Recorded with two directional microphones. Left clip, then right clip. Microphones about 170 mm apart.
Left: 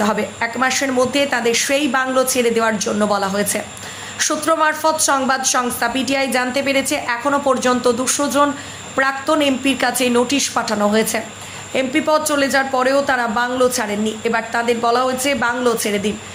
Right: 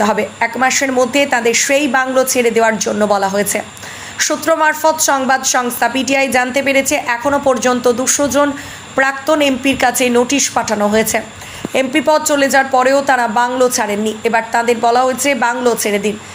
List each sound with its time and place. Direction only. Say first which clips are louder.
0.0 s a woman's voice: right 5 dB; 15° right (ahead or behind)